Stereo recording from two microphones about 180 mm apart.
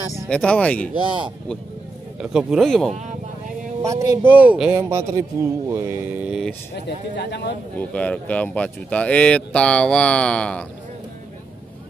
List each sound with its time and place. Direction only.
0.3 s speech: 5° left (ahead or behind)
2.1 s speech: 5° right (ahead or behind)
3.8 s speech: 15° right (ahead or behind)
6.7 s speech: 70° left (ahead or behind)
7.9 s speech: 5° left (ahead or behind)